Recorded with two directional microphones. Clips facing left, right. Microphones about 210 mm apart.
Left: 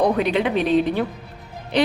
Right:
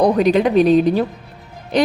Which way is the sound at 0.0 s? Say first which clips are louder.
Right 5 dB; 40° right (ahead or behind).